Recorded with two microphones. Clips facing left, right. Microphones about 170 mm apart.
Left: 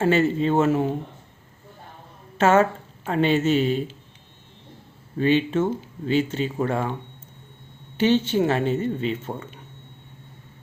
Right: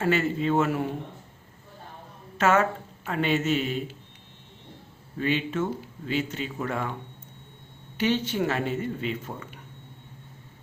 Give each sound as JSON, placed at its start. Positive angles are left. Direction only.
{"t": 0.0, "sound": "speech", "side_deg": 30}
{"t": 2.4, "sound": "speech", "side_deg": 30}
{"t": 5.2, "sound": "speech", "side_deg": 30}
{"t": 7.9, "sound": "speech", "side_deg": 25}